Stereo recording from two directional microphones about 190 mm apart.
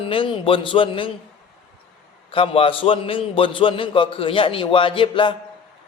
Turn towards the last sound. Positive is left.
turn(degrees=25)  # may be behind; listen again after turning